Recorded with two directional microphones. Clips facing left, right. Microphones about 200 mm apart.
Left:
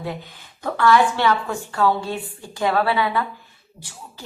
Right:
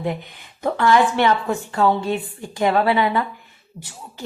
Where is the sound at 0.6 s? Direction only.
20° right (ahead or behind).